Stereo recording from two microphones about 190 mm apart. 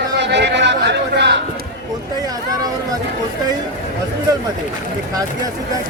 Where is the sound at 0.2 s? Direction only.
65° right (ahead or behind).